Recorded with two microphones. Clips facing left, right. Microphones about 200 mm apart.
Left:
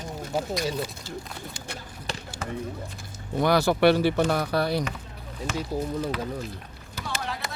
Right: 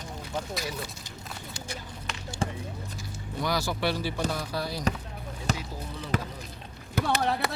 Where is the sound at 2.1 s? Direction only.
35° left (ahead or behind).